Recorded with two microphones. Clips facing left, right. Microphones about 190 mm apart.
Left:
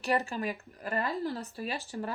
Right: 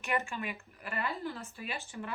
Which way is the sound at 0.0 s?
35° left (ahead or behind).